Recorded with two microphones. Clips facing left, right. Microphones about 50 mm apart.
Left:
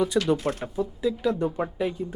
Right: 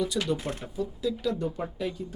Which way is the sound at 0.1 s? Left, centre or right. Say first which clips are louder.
Left 6 dB; left.